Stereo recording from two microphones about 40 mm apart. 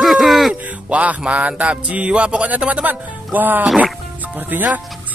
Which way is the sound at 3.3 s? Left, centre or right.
Right.